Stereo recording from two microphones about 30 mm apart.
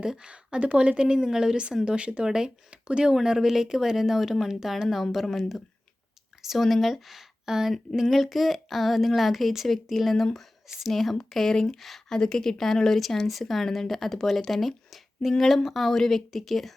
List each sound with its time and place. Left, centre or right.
0.6 s speech: right
1.2 s speech: centre
1.8 s speech: right
2.2 s speech: right
2.6 s speech: right
3.2 s speech: centre
5.1 s a woman's voice: centre
6.6 s a woman's voice: centre
6.9 s speech: centre
7.4 s a sound: centre
7.9 s a woman's voice: centre
12.0 s a woman's voice: left; by 16.7 s centre